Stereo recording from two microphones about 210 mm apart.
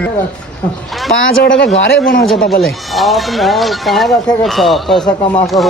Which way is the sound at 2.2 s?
Centre (ahead or behind).